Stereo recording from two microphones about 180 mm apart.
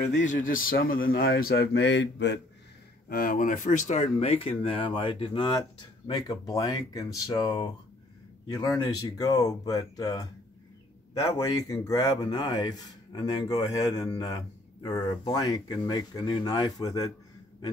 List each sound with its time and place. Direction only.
0.1 s a man's voice: 45° left (ahead or behind); by 2.4 s 75° left (ahead or behind)
3.1 s speech: 55° left (ahead or behind); by 10.2 s 20° left (ahead or behind)
11.3 s speech: 20° left (ahead or behind)